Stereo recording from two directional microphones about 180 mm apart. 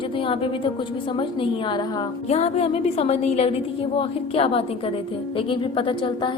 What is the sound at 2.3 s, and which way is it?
A woman's voice, 35° left (ahead or behind).